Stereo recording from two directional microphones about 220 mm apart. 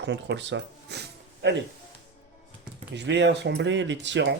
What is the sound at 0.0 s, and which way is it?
Speech, 55° right (ahead or behind).